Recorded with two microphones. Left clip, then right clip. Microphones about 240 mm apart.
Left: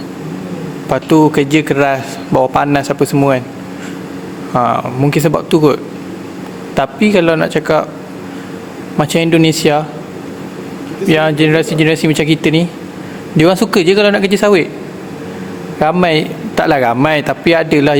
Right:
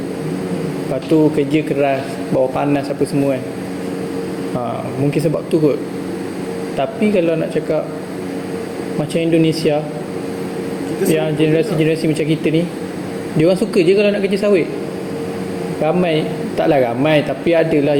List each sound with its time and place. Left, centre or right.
1.1 s a man's voice: left
4.6 s a man's voice: left
6.7 s a man's voice: left
9.0 s a man's voice: left
11.1 s a man's voice: left
15.8 s a man's voice: left